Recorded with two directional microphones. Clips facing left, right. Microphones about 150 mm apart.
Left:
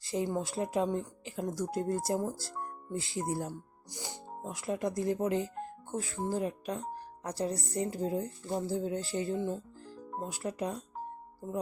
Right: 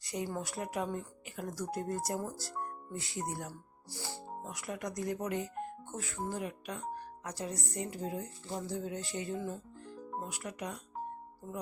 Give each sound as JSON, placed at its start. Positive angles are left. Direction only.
{"t": 0.0, "sound": "speech", "side_deg": 25}